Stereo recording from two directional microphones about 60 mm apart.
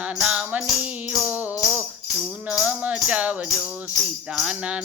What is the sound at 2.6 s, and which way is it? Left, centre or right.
Music, right.